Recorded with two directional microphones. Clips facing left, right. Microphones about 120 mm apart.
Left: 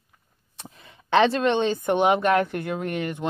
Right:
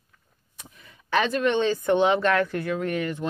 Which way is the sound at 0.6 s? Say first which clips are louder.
Left 5 dB; 30° left (ahead or behind).